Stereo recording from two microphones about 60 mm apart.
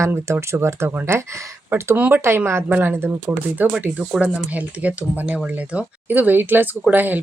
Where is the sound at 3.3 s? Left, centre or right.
Right.